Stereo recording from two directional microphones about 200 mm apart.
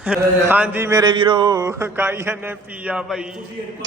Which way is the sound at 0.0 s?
5° right (ahead or behind).